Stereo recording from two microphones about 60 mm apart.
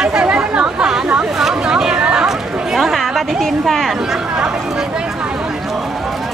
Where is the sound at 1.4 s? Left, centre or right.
Centre.